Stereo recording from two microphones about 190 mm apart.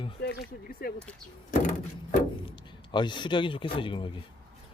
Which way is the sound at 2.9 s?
25° left (ahead or behind).